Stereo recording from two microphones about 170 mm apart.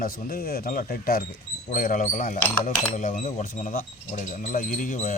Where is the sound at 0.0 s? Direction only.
60° left (ahead or behind).